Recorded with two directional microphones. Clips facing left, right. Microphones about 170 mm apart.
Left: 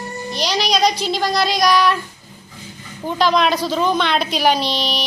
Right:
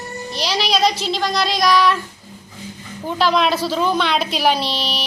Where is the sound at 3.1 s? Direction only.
5° right (ahead or behind).